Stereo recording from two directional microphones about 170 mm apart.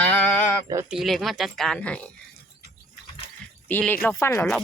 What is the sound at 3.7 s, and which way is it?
Speech, 10° left (ahead or behind).